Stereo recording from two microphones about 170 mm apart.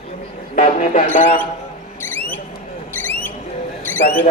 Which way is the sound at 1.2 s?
50° left (ahead or behind).